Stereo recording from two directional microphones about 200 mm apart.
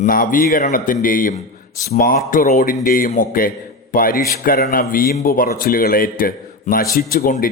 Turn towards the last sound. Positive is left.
turn(degrees=45)  # may be behind; listen again after turning